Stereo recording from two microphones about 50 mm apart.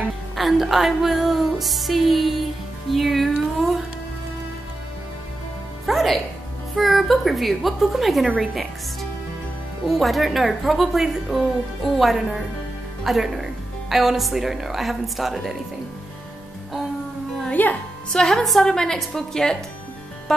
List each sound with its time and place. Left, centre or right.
0.4 s speech: centre
5.9 s music: centre
6.7 s speech: centre
9.8 s speech: centre
17.5 s music: left
18.1 s a woman's voice: centre